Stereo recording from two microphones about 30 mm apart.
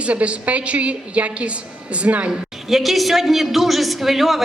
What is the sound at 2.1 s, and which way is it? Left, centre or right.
Speech, right.